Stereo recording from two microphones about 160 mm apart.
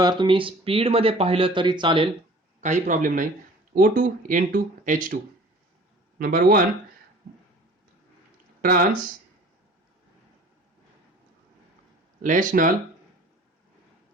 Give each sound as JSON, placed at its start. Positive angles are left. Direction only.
{"t": 0.0, "sound": "speech", "side_deg": -30}
{"t": 2.6, "sound": "a man's voice", "side_deg": -50}
{"t": 8.6, "sound": "speech", "side_deg": -60}
{"t": 12.2, "sound": "speech", "side_deg": -55}